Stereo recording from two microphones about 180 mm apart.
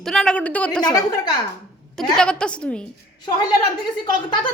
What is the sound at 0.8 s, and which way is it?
Speech, 20° left (ahead or behind).